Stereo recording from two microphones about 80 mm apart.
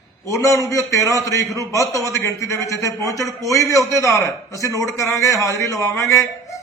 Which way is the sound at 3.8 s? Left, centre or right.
Right.